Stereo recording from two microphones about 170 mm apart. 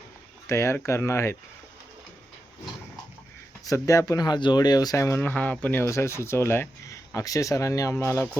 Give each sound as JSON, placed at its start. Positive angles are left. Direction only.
{"t": 0.4, "sound": "speech", "side_deg": 15}
{"t": 3.7, "sound": "speech", "side_deg": 20}